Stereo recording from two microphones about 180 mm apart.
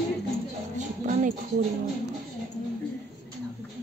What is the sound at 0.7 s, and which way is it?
Music, 40° right (ahead or behind).